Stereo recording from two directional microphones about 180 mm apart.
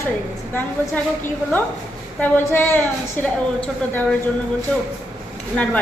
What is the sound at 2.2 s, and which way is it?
A woman's voice, 10° left (ahead or behind).